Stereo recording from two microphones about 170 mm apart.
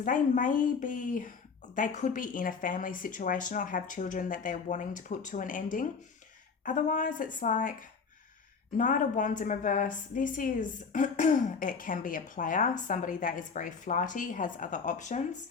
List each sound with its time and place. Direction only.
0.0 s speech: 50° left (ahead or behind)
8.8 s speech: 50° left (ahead or behind)